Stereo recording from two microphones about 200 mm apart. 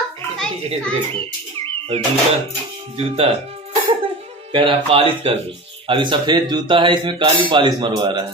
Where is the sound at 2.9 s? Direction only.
30° right (ahead or behind).